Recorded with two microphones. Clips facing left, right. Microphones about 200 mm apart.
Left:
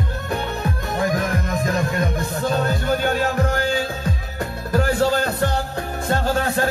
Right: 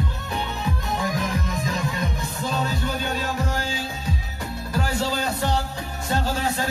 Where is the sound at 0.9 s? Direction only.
55° left (ahead or behind).